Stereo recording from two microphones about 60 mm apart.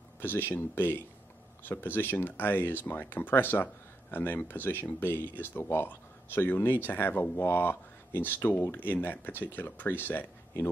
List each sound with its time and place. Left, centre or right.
0.2 s speech: left